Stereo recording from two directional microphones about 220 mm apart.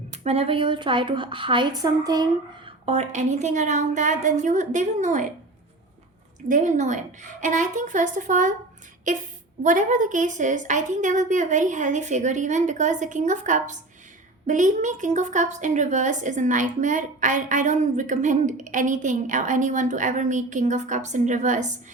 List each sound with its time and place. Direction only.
0.1 s a woman's voice: 30° right (ahead or behind)
2.8 s a woman's voice: 30° right (ahead or behind)
6.5 s a woman's voice: 35° right (ahead or behind)